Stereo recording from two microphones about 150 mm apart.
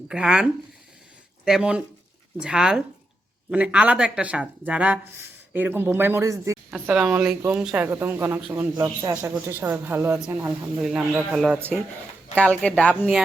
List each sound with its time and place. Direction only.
0.1 s speech: 5° right (ahead or behind); by 6.6 s 20° right (ahead or behind)
6.7 s speech: 10° right (ahead or behind)
7.9 s speech: 15° right (ahead or behind); by 13.1 s 5° left (ahead or behind)